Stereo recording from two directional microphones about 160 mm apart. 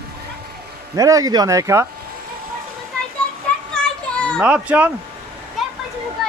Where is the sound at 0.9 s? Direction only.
20° right (ahead or behind).